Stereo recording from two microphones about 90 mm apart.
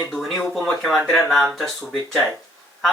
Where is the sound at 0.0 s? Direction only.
Centre (ahead or behind).